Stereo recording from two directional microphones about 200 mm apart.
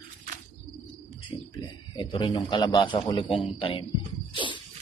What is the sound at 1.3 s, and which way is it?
A man's voice, 20° left (ahead or behind).